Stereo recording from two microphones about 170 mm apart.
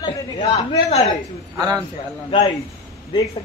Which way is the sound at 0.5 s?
40° left (ahead or behind).